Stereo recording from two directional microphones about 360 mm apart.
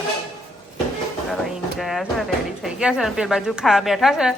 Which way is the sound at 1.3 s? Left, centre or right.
Centre.